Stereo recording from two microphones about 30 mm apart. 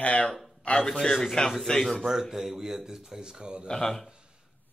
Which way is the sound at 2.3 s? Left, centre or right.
Centre.